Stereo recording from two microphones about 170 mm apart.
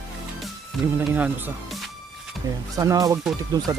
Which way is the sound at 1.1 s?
10° right (ahead or behind).